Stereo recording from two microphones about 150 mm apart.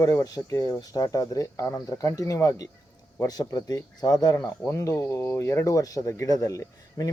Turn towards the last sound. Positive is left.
turn(degrees=25)  # may be behind; listen again after turning